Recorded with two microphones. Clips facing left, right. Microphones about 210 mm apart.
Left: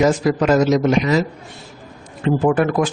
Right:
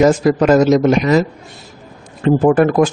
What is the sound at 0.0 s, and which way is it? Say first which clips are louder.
A man's voice: right 4 dB; 50° right (ahead or behind).